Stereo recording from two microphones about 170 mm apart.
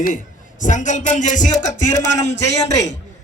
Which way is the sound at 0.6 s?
50° left (ahead or behind).